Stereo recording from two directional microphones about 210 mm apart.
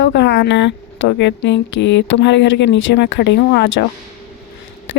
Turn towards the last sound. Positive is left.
turn(degrees=55)  # may be behind; listen again after turning